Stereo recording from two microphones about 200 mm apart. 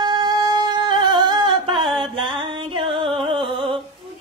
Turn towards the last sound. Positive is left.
turn(degrees=-25)  # may be behind; listen again after turning